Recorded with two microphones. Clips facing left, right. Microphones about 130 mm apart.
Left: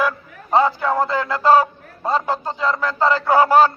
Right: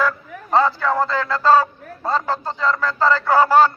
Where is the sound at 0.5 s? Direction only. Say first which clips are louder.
Left 1 dB; 15° left (ahead or behind).